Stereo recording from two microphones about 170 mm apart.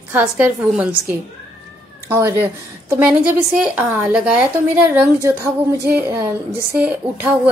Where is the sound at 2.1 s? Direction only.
15° right (ahead or behind).